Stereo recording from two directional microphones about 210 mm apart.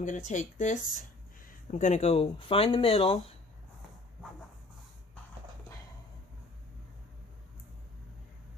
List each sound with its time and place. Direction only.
0.0 s speech: 35° left (ahead or behind)